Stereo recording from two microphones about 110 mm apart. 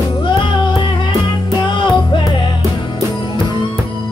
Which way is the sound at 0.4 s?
45° left (ahead or behind).